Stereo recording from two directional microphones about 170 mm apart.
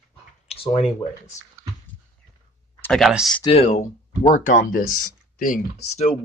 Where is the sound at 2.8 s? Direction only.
Centre (ahead or behind).